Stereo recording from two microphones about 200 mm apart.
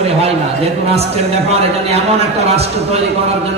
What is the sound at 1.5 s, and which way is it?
A man's voice, 30° right (ahead or behind).